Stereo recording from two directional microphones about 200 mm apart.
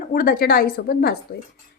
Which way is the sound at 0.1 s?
45° left (ahead or behind).